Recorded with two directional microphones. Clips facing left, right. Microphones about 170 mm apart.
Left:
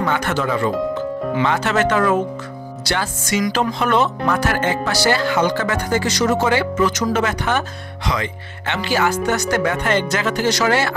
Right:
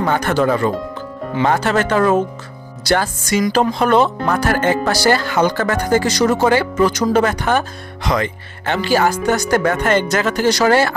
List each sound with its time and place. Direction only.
0.0 s speech: 40° right (ahead or behind)